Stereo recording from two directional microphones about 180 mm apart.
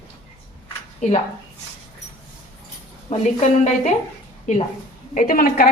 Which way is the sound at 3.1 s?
40° left (ahead or behind).